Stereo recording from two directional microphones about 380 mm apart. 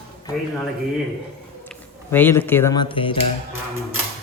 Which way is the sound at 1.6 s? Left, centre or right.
Centre.